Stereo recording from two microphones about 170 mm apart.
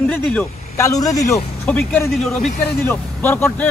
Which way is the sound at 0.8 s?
20° left (ahead or behind).